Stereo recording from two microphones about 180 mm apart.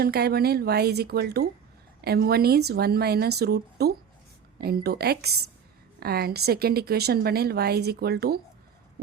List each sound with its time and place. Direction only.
0.0 s speech: 60° right (ahead or behind)